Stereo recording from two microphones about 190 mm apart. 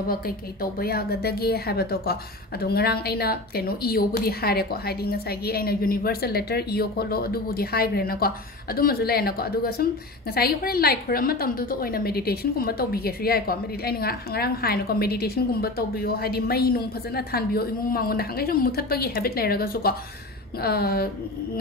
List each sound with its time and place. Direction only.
0.1 s a woman's voice: 50° left (ahead or behind)